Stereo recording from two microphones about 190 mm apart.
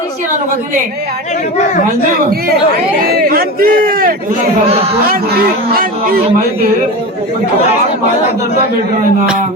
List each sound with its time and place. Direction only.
1.5 s speech: 40° left (ahead or behind)
3.0 s a man's voice: 50° right (ahead or behind)
4.7 s speech: 30° right (ahead or behind)
5.1 s a man's voice: 50° right (ahead or behind)